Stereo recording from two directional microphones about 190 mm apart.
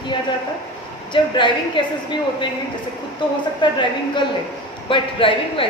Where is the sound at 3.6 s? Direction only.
25° left (ahead or behind).